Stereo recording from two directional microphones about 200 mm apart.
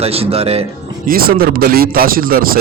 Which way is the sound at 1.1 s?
45° right (ahead or behind).